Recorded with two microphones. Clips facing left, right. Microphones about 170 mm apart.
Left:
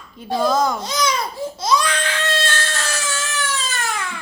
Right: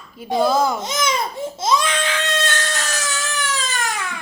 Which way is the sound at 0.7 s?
20° right (ahead or behind).